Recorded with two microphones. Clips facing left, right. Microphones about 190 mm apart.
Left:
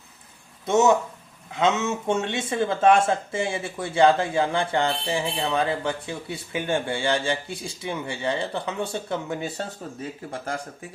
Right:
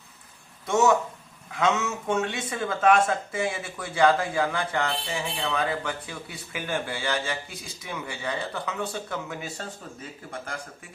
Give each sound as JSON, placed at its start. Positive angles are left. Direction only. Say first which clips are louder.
{"t": 0.7, "sound": "speech", "louder": "left 3 dB", "side_deg": 20}